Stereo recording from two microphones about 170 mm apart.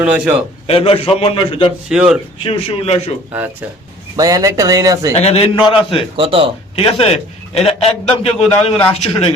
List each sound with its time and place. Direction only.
0.0 s a man's voice: 10° right (ahead or behind)
0.7 s a man's voice: 35° left (ahead or behind)
1.9 s speech: 5° right (ahead or behind)
2.4 s a man's voice: 35° left (ahead or behind)
4.2 s speech: 20° right (ahead or behind)
5.1 s a man's voice: 40° left (ahead or behind)
6.1 s speech: 30° right (ahead or behind)
6.7 s a man's voice: 35° left (ahead or behind)